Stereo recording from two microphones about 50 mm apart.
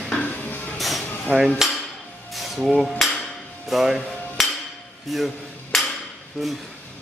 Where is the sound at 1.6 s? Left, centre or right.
Centre.